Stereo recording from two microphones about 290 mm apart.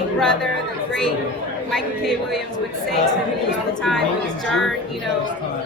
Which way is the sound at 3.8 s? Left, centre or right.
Centre.